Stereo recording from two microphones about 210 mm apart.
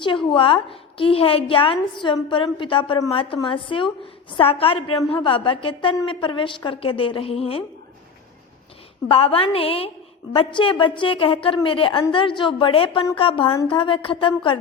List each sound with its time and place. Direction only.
0.3 s a woman's voice: 25° left (ahead or behind)
9.0 s a woman's voice: 25° left (ahead or behind)